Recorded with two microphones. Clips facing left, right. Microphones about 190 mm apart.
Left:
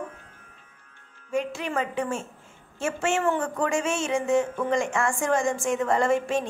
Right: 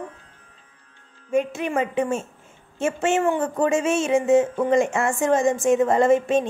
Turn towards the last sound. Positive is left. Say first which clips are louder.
# right 6 dB
turn(degrees=-20)  # may be behind; listen again after turning